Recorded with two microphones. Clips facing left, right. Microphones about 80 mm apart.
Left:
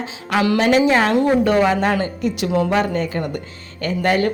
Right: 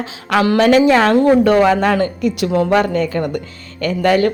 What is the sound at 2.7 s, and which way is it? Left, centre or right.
Speech, right.